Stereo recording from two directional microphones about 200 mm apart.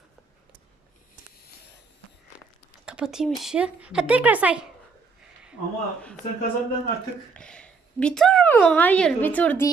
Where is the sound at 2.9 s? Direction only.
5° right (ahead or behind).